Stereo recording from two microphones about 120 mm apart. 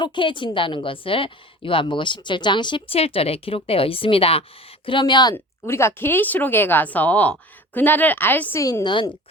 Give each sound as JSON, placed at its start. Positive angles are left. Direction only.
{"t": 0.0, "sound": "a woman's voice", "side_deg": 45}
{"t": 2.9, "sound": "a woman's voice", "side_deg": 55}
{"t": 4.9, "sound": "speech", "side_deg": 40}
{"t": 5.6, "sound": "a woman's voice", "side_deg": 20}
{"t": 8.8, "sound": "speech", "side_deg": 40}